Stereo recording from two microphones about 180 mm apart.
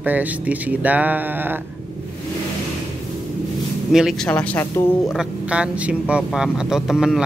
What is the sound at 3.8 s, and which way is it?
Speech, centre (ahead or behind).